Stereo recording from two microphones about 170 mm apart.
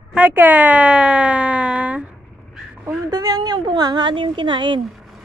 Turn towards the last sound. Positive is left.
turn(degrees=-30)  # may be behind; listen again after turning